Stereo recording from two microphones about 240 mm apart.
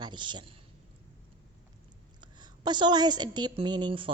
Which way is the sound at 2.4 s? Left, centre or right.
Centre.